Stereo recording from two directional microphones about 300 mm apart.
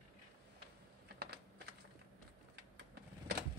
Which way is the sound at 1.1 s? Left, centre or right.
Right.